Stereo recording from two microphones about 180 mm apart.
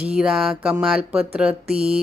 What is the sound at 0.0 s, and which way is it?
Speech, 5° right (ahead or behind).